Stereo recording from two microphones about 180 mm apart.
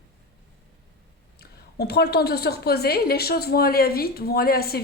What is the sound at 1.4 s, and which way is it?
A woman's voice, 65° left (ahead or behind).